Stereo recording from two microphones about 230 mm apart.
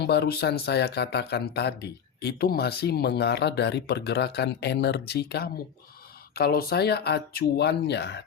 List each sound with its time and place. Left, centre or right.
0.0 s speech: left